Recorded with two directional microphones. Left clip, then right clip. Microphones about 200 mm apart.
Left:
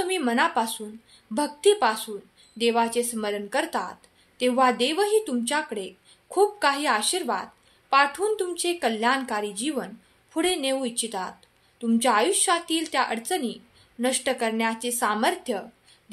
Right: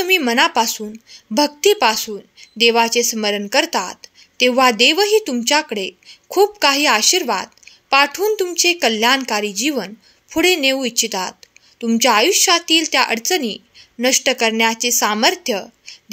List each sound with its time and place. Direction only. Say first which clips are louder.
0.0 s speech: right 9 dB; 40° right (ahead or behind)